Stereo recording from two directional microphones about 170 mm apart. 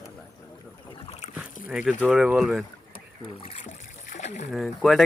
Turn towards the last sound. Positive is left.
turn(degrees=0)  # may be behind; listen again after turning